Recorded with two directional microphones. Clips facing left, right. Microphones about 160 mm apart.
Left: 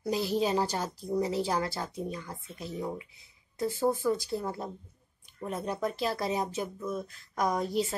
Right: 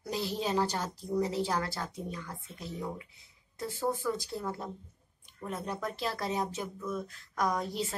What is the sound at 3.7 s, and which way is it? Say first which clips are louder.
Speech: left 4 dB; 15° left (ahead or behind).